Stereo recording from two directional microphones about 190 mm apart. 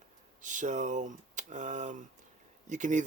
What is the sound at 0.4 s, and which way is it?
Speech, 40° right (ahead or behind).